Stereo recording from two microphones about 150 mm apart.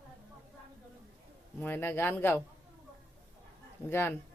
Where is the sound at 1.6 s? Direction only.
15° left (ahead or behind).